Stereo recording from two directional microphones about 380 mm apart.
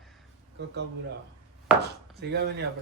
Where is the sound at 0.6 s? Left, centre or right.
Right.